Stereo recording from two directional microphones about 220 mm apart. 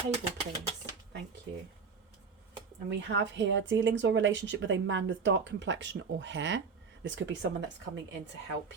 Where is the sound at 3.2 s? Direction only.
55° right (ahead or behind).